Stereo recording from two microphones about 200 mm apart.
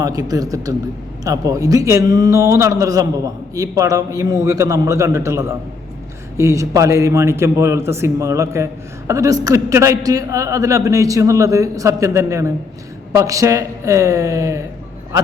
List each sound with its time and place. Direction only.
0.0 s a man's voice: 20° right (ahead or behind)